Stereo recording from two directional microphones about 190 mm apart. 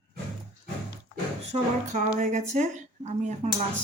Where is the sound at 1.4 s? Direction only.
35° right (ahead or behind).